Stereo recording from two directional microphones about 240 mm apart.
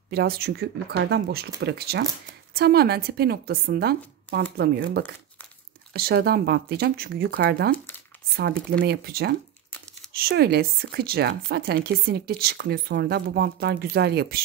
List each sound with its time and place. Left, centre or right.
0.1 s speech: right
8.7 s speech: right